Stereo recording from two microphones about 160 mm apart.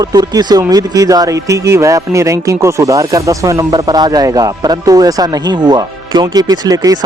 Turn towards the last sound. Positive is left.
turn(degrees=-25)  # may be behind; listen again after turning